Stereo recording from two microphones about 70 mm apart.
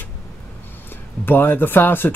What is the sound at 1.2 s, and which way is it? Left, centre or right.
Speech, left.